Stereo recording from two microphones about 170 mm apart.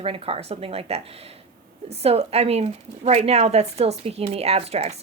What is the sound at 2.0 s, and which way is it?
Speech, 35° right (ahead or behind).